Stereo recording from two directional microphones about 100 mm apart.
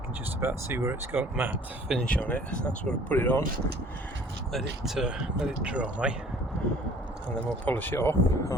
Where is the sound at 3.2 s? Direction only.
20° left (ahead or behind).